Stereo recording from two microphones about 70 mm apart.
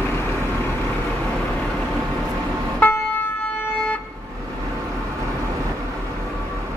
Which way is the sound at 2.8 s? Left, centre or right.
Left.